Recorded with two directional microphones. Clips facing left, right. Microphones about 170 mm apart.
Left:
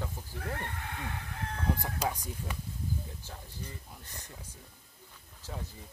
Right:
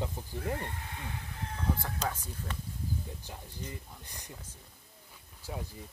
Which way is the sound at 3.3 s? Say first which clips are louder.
Right 2 dB; 15° right (ahead or behind).